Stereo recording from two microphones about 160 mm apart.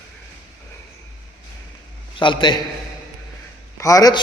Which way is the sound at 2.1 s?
30° left (ahead or behind).